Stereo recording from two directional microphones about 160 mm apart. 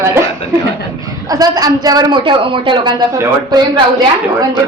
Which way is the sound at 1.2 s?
25° right (ahead or behind).